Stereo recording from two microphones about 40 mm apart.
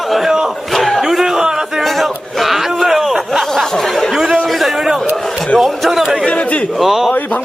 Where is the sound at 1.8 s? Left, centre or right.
Centre.